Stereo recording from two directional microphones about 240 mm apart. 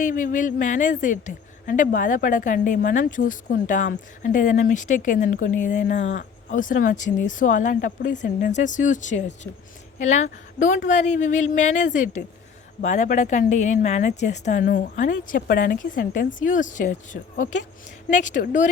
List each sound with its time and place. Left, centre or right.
0.0 s a woman's voice: left